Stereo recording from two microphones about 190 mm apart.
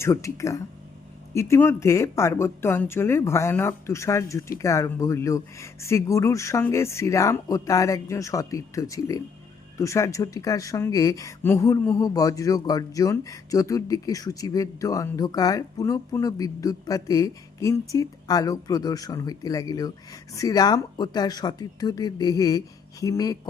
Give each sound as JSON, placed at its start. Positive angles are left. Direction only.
{"t": 0.0, "sound": "speech", "side_deg": 15}